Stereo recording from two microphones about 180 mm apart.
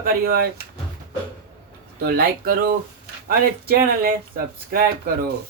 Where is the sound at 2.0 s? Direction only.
60° right (ahead or behind).